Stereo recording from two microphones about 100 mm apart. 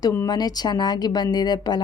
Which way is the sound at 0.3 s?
40° left (ahead or behind).